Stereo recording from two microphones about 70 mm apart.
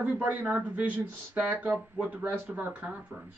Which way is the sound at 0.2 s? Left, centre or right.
Right.